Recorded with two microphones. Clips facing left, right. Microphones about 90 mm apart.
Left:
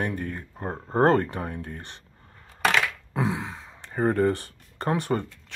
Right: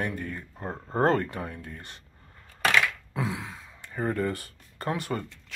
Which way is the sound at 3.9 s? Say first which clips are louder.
Left 6 dB; 35° left (ahead or behind).